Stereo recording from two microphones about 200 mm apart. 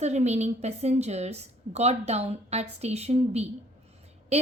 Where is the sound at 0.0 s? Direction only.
35° right (ahead or behind).